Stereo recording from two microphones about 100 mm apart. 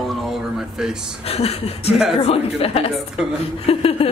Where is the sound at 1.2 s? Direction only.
85° left.